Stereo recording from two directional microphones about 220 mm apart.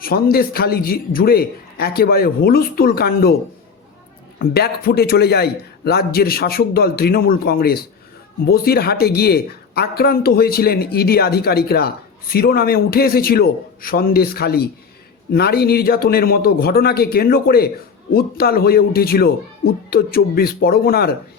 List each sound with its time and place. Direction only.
0.0 s speech: 45° left (ahead or behind)
4.4 s speech: 45° left (ahead or behind)